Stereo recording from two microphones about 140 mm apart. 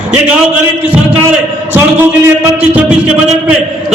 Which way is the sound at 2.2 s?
15° right (ahead or behind).